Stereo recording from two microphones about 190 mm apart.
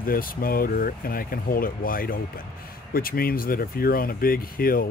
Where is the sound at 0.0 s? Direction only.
50° left (ahead or behind).